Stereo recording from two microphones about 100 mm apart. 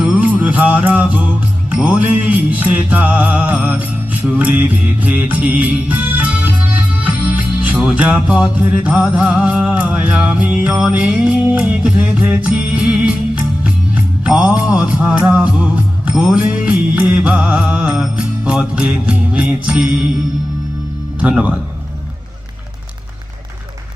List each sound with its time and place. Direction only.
0.0 s music: 15° right (ahead or behind)
21.2 s music: 15° right (ahead or behind)